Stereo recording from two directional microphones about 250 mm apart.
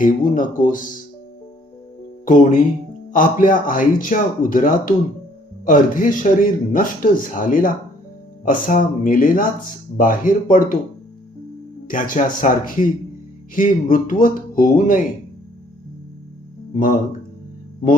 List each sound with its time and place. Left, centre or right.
0.0 s a man's voice: left
2.2 s a man's voice: left
11.9 s a man's voice: left
16.7 s a man's voice: left